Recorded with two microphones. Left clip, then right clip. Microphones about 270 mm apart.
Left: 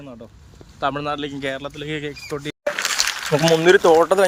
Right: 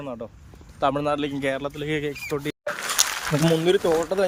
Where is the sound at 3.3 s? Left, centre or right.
Left.